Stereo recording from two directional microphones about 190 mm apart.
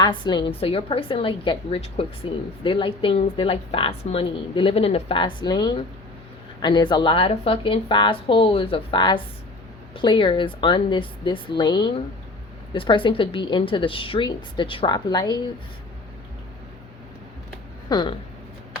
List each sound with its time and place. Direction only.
0.0 s a woman's voice: 25° left (ahead or behind)
17.8 s speech: 20° left (ahead or behind)